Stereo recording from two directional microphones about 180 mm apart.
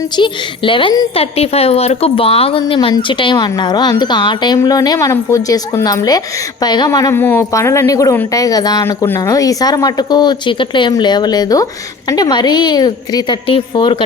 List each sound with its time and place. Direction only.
0.2 s speech: 30° left (ahead or behind)